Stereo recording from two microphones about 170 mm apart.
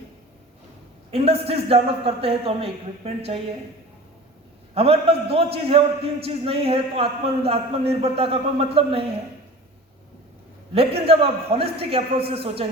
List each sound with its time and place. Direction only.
1.1 s a man's voice: 35° right (ahead or behind)
4.7 s a man's voice: 35° right (ahead or behind)
10.8 s a man's voice: 35° right (ahead or behind)